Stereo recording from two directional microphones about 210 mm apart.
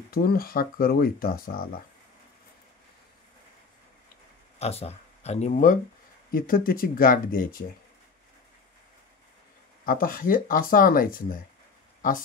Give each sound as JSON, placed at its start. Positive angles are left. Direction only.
{"t": 0.1, "sound": "speech", "side_deg": 45}
{"t": 4.6, "sound": "speech", "side_deg": 30}
{"t": 9.8, "sound": "speech", "side_deg": 40}